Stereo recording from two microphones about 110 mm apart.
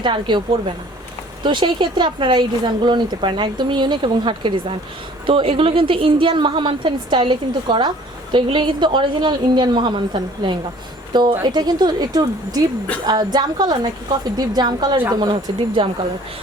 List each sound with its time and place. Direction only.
0.0 s a woman's voice: 45° right (ahead or behind)
1.5 s a woman's voice: 45° right (ahead or behind)